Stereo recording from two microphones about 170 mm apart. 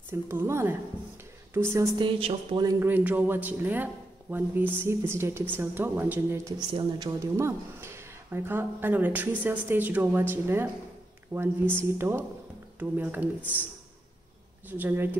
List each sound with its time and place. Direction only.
0.1 s speech: 15° right (ahead or behind)
2.0 s a woman's voice: 30° right (ahead or behind)
2.6 s speech: 10° right (ahead or behind)
6.7 s speech: 25° right (ahead or behind); by 13.3 s 10° right (ahead or behind)
14.7 s speech: 10° right (ahead or behind)